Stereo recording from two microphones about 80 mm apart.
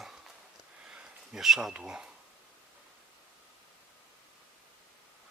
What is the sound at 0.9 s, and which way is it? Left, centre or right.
Speech, centre.